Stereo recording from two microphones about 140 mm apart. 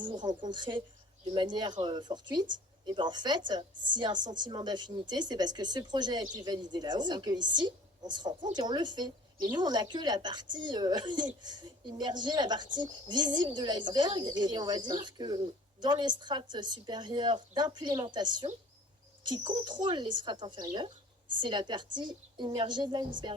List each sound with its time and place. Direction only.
0.0 s a woman's voice: 35° right (ahead or behind)